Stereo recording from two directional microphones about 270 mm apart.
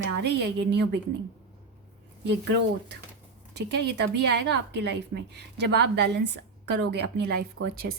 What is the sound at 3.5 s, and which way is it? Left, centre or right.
Speech, right.